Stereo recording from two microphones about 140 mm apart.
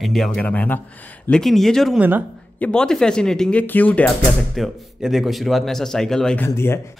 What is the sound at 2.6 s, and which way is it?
Speech, 5° left (ahead or behind).